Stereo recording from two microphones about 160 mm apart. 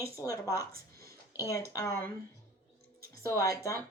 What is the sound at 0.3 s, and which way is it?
Speech, 20° left (ahead or behind).